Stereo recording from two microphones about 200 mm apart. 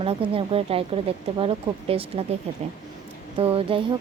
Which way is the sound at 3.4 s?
30° right (ahead or behind).